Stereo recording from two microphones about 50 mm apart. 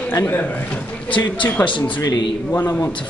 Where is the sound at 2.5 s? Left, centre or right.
Left.